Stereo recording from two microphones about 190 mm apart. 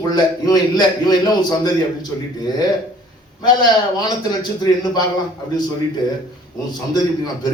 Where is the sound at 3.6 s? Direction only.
20° left (ahead or behind).